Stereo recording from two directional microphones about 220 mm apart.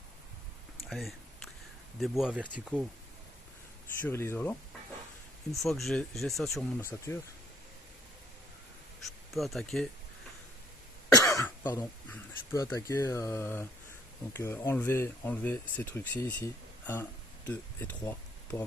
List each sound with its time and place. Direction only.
0.9 s speech: centre (ahead or behind)
4.0 s speech: 10° left (ahead or behind)
9.3 s speech: centre (ahead or behind)
11.1 s speech: 15° left (ahead or behind)